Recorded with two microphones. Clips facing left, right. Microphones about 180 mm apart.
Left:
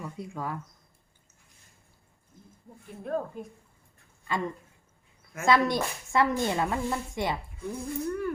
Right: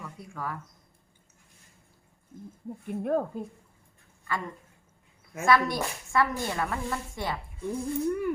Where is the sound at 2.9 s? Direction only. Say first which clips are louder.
Right 5 dB; 55° right (ahead or behind).